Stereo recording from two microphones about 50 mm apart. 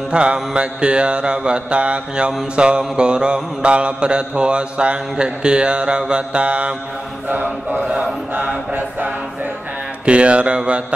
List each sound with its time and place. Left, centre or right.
0.1 s mantra: right
7.2 s a sound: right
7.9 s chant: centre
10.0 s mantra: right